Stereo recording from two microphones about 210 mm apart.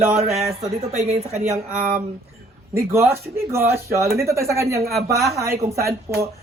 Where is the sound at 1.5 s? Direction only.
10° right (ahead or behind).